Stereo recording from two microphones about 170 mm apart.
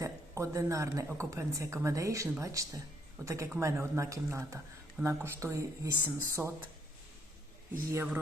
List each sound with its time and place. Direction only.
0.0 s speech: 20° right (ahead or behind)
7.9 s speech: 15° right (ahead or behind)